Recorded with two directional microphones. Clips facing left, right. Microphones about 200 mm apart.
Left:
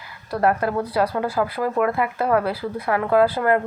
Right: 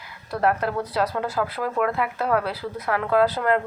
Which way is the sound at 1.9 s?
50° left (ahead or behind).